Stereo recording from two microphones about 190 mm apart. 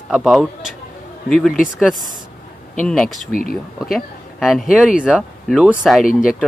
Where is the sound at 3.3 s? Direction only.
50° left (ahead or behind).